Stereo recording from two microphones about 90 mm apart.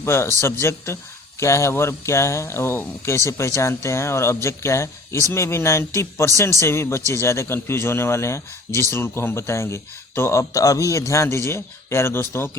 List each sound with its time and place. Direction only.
0.0 s a man's voice: 30° left (ahead or behind)